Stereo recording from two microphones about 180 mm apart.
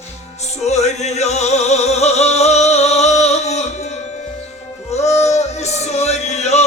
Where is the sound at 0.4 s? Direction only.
40° left (ahead or behind).